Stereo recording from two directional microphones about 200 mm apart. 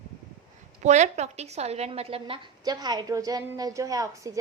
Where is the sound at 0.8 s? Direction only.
35° right (ahead or behind).